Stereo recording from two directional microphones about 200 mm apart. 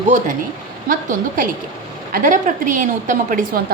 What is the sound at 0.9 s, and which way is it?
A woman's voice, 45° right (ahead or behind).